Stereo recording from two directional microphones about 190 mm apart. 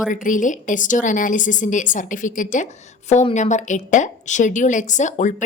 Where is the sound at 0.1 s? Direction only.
45° left (ahead or behind).